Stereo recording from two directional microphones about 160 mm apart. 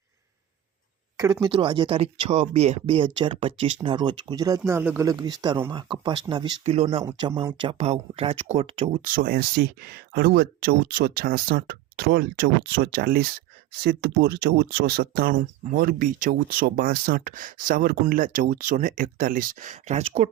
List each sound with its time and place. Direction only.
1.1 s speech: 25° right (ahead or behind)
5.0 s speech: 25° right (ahead or behind)
9.0 s speech: 60° right (ahead or behind)
13.8 s speech: 90° right; by 20.3 s 40° right (ahead or behind)